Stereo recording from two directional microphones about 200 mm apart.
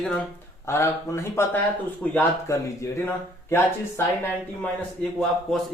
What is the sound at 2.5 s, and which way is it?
Speech, 15° left (ahead or behind).